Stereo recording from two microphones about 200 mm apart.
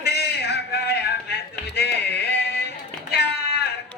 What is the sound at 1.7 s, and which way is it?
Music, 55° left (ahead or behind).